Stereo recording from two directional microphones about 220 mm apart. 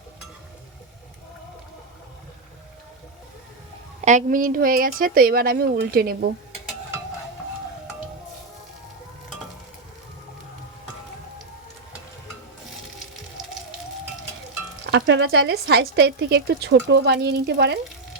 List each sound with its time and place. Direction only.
4.0 s a woman's voice: 35° right (ahead or behind)
14.9 s speech: 50° right (ahead or behind)